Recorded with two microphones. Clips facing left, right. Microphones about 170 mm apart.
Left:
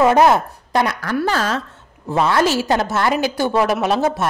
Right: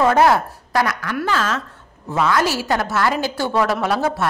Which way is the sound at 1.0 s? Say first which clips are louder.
Left 2 dB; 40° left (ahead or behind).